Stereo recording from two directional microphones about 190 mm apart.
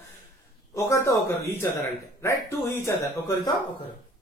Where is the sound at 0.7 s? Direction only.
15° left (ahead or behind).